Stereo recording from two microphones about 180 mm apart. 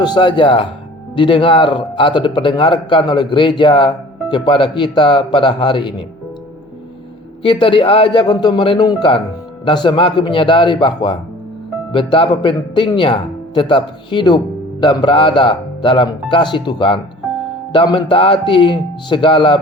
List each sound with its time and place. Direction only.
0.0 s speech: 25° left (ahead or behind)
7.4 s speech: 30° left (ahead or behind)